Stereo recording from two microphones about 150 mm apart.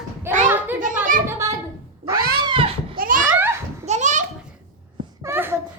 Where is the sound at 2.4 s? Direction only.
35° right (ahead or behind).